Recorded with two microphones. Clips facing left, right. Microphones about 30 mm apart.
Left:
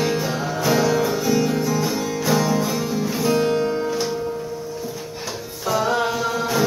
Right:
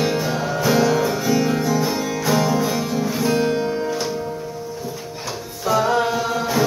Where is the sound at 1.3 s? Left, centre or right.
Centre.